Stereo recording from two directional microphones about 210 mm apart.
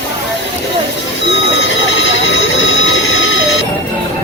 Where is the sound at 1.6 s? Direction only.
65° left (ahead or behind).